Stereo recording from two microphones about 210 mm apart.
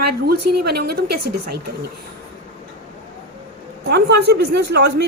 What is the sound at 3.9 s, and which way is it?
A woman's voice, 50° right (ahead or behind).